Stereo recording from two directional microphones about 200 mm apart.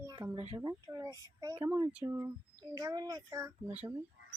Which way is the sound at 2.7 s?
20° right (ahead or behind).